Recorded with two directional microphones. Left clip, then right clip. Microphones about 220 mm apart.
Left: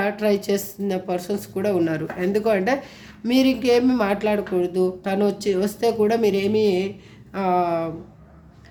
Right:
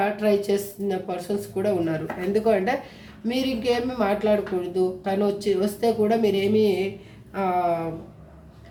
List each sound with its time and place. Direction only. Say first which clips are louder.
0.0 s speech: even; 45° left (ahead or behind)